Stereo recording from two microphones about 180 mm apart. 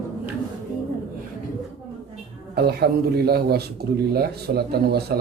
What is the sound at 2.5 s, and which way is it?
Speech, 60° right (ahead or behind).